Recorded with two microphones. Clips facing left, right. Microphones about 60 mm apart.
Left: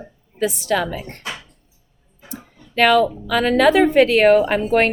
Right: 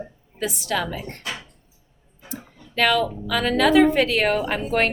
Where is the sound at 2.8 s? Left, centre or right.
Left.